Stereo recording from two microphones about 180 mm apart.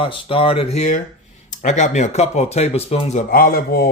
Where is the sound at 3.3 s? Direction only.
55° left (ahead or behind).